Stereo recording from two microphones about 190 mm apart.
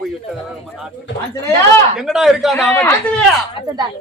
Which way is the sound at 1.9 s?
5° right (ahead or behind).